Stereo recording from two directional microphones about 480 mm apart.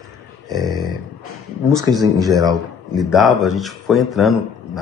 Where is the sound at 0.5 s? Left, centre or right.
Centre.